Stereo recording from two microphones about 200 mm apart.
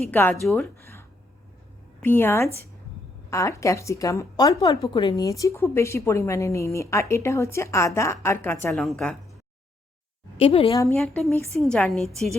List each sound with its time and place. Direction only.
0.0 s a woman's voice: 10° left (ahead or behind)
0.8 s a sound: 15° left (ahead or behind)
2.0 s a woman's voice: 10° left (ahead or behind)
10.3 s a woman's voice: 30° left (ahead or behind)
10.9 s a woman's voice: centre (ahead or behind)